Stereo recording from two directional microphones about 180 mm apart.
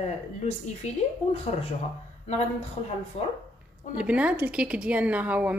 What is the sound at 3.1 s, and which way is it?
Speech, 35° left (ahead or behind).